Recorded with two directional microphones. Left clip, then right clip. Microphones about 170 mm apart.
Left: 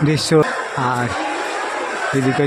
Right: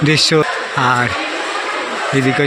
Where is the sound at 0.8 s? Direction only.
5° left (ahead or behind).